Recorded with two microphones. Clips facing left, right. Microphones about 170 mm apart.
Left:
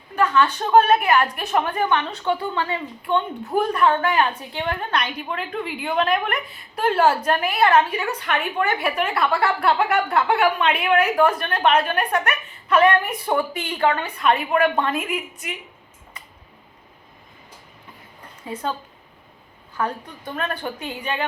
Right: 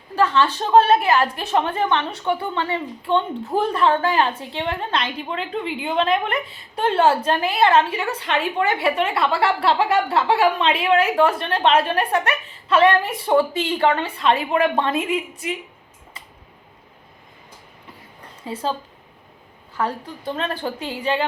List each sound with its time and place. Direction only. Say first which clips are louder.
0.2 s a woman's voice: right 1 dB; 25° right (ahead or behind)
18.4 s a woman's voice: right 2 dB; 30° right (ahead or behind)
19.7 s a woman's voice: right 1 dB; 25° right (ahead or behind)